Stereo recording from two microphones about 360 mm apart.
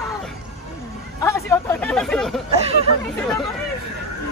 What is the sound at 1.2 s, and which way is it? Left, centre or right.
A woman's voice, centre.